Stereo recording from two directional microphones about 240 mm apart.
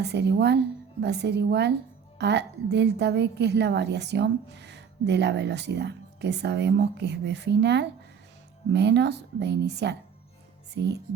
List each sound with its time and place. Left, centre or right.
0.0 s a woman's voice: right